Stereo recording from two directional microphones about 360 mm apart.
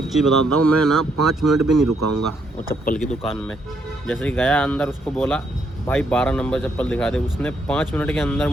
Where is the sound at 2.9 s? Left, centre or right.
Centre.